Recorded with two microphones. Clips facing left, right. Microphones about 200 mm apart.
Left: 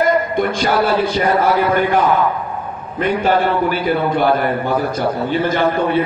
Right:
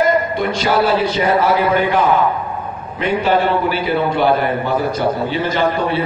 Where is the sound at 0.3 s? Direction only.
50° left (ahead or behind).